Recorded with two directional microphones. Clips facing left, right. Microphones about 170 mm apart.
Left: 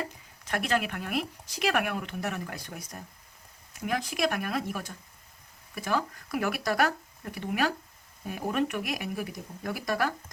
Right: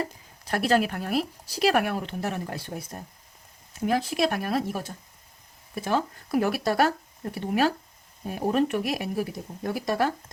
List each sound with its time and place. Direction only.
0.0 s speech: 35° right (ahead or behind)